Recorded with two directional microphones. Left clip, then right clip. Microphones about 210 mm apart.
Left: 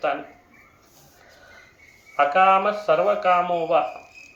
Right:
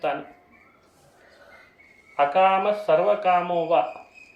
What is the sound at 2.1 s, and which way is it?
Speech, centre (ahead or behind).